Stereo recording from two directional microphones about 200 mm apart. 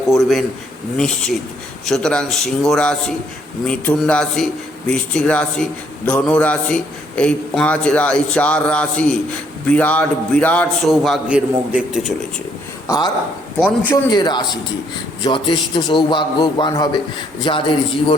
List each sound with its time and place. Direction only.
0.1 s a man's voice: centre (ahead or behind)
1.9 s a man's voice: 5° left (ahead or behind)
13.6 s a man's voice: 10° left (ahead or behind)
14.1 s a man's voice: 20° left (ahead or behind)